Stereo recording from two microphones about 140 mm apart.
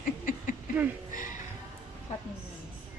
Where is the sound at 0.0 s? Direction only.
75° left (ahead or behind).